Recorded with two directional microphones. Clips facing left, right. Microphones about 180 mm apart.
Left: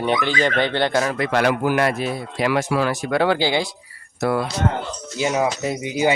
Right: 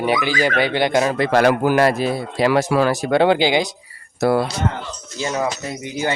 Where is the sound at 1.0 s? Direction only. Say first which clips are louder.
Right 4 dB; 30° right (ahead or behind).